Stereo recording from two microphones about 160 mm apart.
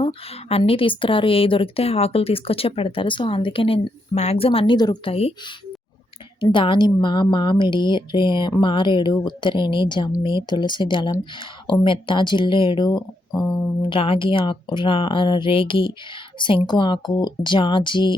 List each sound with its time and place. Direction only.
0.0 s a woman's voice: 35° left (ahead or behind)
6.4 s a woman's voice: 30° left (ahead or behind)